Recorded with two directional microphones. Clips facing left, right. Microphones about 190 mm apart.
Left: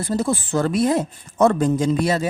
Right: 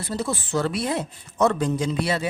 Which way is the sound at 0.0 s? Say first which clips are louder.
Left 6 dB; 45° left (ahead or behind).